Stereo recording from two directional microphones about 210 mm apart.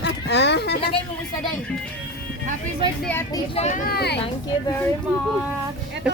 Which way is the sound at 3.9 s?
50° left (ahead or behind).